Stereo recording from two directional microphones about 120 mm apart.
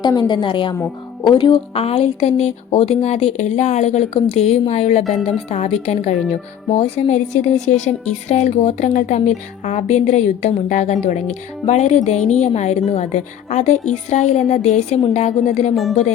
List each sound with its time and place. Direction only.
0.0 s a woman's voice: 35° left (ahead or behind)
1.7 s speech: 55° left (ahead or behind)
6.7 s a woman's voice: 55° left (ahead or behind)
15.7 s speech: centre (ahead or behind)